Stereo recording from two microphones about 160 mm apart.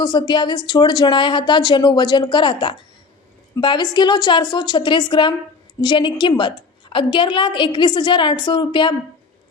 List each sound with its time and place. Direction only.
0.0 s a woman's voice: 25° left (ahead or behind)